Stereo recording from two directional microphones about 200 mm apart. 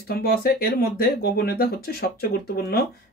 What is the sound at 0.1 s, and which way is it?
Speech, 50° left (ahead or behind).